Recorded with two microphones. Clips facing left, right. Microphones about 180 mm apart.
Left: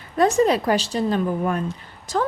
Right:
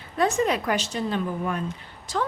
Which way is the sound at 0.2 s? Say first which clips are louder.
Left 5 dB; 35° left (ahead or behind).